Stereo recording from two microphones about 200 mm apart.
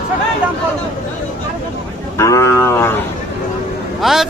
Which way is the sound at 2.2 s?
15° left (ahead or behind).